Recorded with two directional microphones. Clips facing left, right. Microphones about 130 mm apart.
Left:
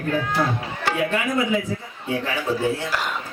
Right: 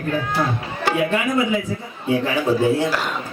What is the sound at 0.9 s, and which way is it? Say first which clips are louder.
Speech: right 3 dB; 15° right (ahead or behind).